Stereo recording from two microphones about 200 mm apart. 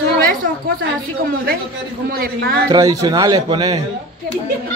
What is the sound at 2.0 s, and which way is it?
Speech, 50° right (ahead or behind).